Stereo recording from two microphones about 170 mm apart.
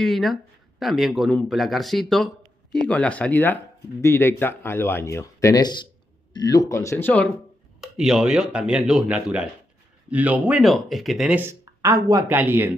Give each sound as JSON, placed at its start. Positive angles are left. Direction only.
{"t": 0.0, "sound": "speech", "side_deg": 0}
{"t": 7.8, "sound": "speech", "side_deg": -5}